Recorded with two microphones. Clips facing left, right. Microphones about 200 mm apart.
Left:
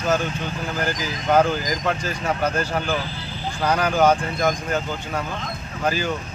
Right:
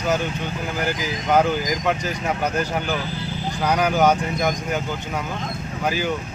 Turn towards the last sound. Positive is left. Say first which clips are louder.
# even
turn(degrees=-15)  # may be behind; listen again after turning